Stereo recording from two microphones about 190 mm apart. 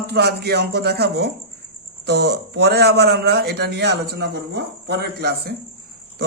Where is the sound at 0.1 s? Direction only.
55° right (ahead or behind).